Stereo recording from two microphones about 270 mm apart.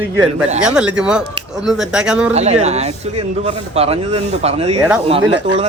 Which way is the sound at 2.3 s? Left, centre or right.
Right.